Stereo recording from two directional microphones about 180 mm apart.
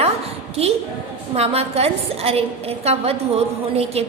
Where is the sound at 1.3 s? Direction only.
35° right (ahead or behind).